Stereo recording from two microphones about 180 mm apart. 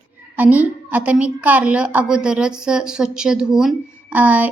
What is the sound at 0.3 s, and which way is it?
A woman's voice, 10° right (ahead or behind).